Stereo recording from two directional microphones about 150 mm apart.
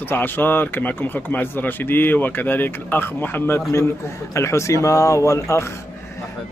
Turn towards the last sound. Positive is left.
turn(degrees=20)  # may be behind; listen again after turning